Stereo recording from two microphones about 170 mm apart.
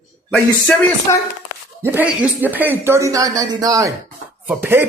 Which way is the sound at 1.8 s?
10° right (ahead or behind).